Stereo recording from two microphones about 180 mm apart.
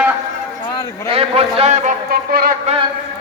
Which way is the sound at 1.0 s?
35° right (ahead or behind).